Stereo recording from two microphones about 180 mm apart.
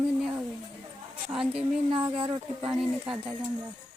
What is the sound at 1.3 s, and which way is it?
Speech, 5° right (ahead or behind).